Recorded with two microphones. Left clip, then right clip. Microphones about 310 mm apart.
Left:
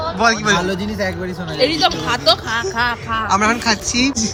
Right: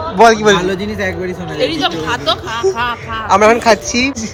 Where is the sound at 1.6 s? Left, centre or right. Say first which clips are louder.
Even; left.